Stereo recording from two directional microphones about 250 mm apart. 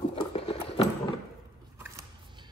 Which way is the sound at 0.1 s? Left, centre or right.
Left.